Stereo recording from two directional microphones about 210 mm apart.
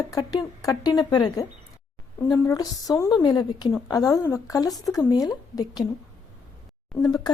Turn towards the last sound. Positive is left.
turn(degrees=20)  # may be behind; listen again after turning